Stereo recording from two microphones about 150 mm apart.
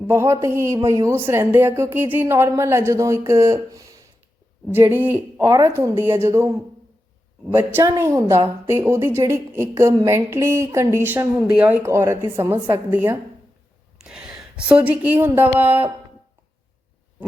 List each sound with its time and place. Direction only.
0.1 s a woman's voice: 15° right (ahead or behind)
7.5 s a woman's voice: 15° right (ahead or behind)